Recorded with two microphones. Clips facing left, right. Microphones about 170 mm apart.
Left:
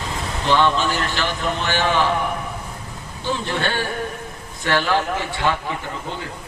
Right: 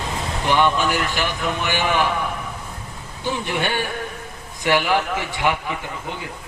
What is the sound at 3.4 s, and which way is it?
A man's voice, 15° right (ahead or behind).